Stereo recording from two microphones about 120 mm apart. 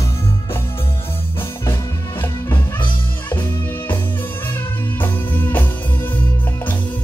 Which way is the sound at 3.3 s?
15° left (ahead or behind).